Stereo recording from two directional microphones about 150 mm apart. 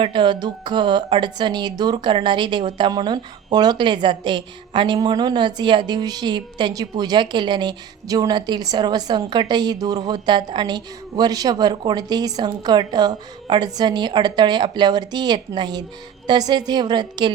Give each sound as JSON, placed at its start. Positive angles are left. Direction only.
{"t": 0.0, "sound": "a woman's voice", "side_deg": -35}